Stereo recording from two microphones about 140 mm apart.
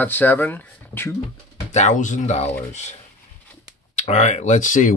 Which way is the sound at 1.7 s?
55° left (ahead or behind).